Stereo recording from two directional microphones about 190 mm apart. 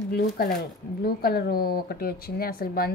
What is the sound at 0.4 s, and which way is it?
Speech, 55° left (ahead or behind).